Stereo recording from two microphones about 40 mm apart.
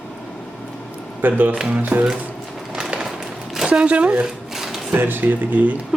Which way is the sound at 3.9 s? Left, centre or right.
Right.